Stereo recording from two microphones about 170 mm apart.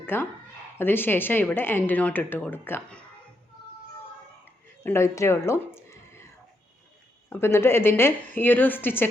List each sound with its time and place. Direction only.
0.0 s speech: 10° left (ahead or behind)
4.8 s speech: 15° left (ahead or behind)
7.3 s speech: 15° left (ahead or behind)